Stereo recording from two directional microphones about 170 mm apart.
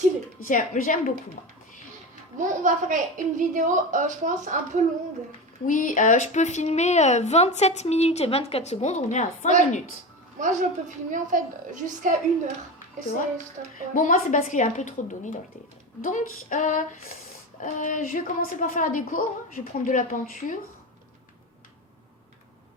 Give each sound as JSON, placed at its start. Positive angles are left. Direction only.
{"t": 0.4, "sound": "a woman's voice", "side_deg": 50}
{"t": 2.4, "sound": "a woman's voice", "side_deg": -50}
{"t": 5.6, "sound": "a woman's voice", "side_deg": 50}
{"t": 10.4, "sound": "a woman's voice", "side_deg": -50}
{"t": 13.6, "sound": "a woman's voice", "side_deg": -45}
{"t": 13.9, "sound": "a woman's voice", "side_deg": 50}